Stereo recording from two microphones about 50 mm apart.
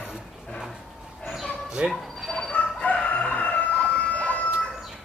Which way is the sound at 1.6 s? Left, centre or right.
Centre.